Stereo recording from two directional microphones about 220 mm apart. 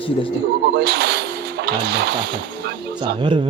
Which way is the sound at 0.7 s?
50° right (ahead or behind).